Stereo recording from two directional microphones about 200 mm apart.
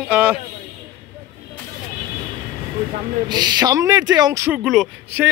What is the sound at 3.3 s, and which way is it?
Speech, 20° right (ahead or behind).